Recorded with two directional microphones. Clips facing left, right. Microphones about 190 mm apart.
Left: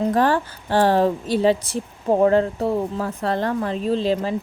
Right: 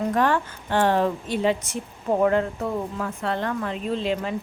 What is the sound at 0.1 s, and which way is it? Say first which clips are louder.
A woman's voice: left 3 dB; 35° left (ahead or behind).